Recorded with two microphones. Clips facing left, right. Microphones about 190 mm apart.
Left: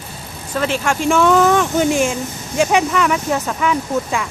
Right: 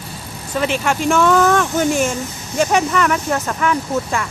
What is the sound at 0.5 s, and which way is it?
Speech, 5° right (ahead or behind).